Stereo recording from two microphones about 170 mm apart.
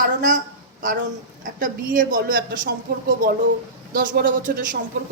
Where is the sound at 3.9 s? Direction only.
55° right (ahead or behind).